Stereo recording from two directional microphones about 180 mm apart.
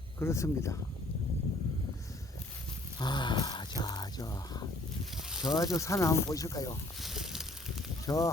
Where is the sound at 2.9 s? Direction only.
25° left (ahead or behind).